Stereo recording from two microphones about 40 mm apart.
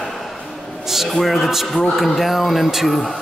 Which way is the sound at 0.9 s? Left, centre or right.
Centre.